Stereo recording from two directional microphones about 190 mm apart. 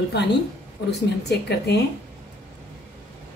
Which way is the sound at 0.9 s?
60° left (ahead or behind).